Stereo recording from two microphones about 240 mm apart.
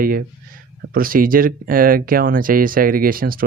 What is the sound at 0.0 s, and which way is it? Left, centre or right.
Speech, right.